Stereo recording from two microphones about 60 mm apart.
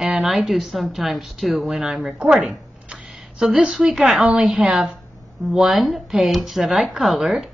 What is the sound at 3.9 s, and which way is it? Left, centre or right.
Speech, centre.